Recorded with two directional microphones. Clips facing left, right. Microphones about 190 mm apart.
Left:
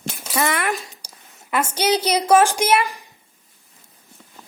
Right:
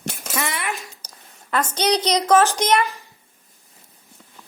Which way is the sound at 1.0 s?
10° left (ahead or behind).